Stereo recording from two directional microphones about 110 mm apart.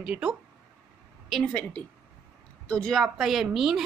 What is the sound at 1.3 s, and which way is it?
A woman's voice, 5° left (ahead or behind).